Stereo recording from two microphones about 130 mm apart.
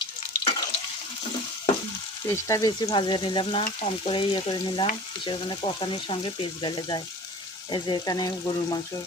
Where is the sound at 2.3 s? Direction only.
25° left (ahead or behind).